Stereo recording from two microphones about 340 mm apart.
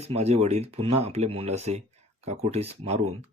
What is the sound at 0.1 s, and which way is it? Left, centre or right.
Speech, centre.